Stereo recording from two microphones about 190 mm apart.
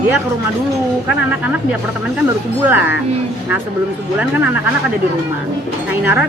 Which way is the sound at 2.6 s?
10° right (ahead or behind).